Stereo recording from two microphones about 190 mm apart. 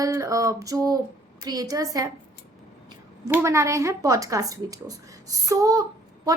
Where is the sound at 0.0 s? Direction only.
15° right (ahead or behind).